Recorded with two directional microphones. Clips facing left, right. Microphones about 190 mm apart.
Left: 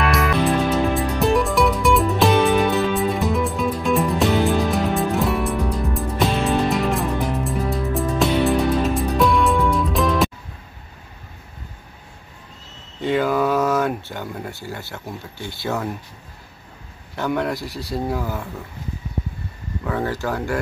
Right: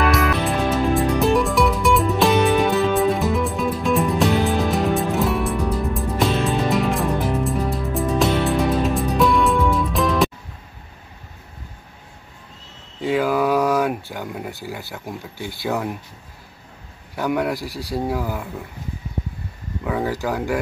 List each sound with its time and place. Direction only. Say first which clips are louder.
0.0 s music: even; centre (ahead or behind)
13.0 s a sound: even; 5° right (ahead or behind)
14.1 s speech: right 1 dB; 10° right (ahead or behind)
17.1 s speech: right 1 dB; 10° right (ahead or behind)
19.8 s speech: right 1 dB; 10° right (ahead or behind)